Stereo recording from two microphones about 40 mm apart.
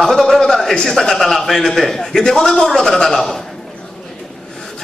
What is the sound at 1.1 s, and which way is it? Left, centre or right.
A man's voice, centre.